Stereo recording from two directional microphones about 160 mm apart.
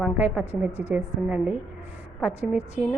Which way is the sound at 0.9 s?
10° right (ahead or behind).